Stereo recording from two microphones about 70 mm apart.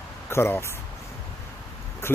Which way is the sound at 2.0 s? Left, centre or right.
Left.